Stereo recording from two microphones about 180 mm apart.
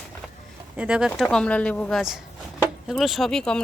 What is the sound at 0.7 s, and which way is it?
Speech, 5° right (ahead or behind).